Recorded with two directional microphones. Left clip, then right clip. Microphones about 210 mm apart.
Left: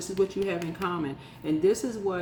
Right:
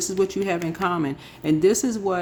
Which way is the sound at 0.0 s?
55° right (ahead or behind).